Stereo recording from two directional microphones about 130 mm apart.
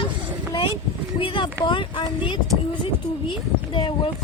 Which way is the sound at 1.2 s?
40° left (ahead or behind).